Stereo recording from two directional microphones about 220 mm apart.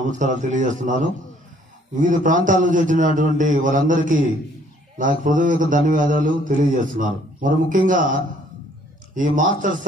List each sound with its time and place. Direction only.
0.0 s speech: 35° right (ahead or behind)